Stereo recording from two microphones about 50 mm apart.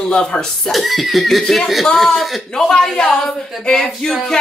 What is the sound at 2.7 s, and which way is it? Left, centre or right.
Speech, centre.